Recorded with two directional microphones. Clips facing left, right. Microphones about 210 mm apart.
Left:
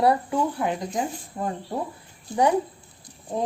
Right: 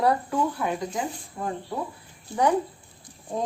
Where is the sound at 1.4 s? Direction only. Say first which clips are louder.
Left 3 dB; 35° left (ahead or behind).